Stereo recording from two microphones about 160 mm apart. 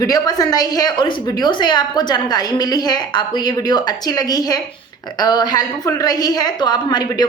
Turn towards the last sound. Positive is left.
turn(degrees=25)  # may be behind; listen again after turning